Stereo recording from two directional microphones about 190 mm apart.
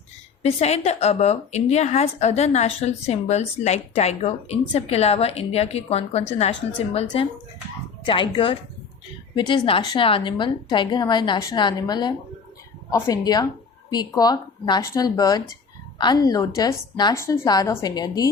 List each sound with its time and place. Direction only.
0.4 s a woman's voice: 35° left (ahead or behind)